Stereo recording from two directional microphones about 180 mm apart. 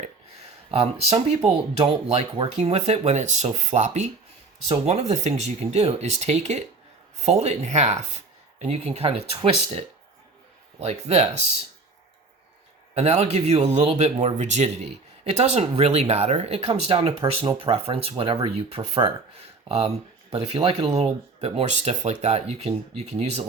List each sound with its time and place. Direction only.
0.7 s speech: 35° right (ahead or behind)
12.9 s speech: 35° right (ahead or behind)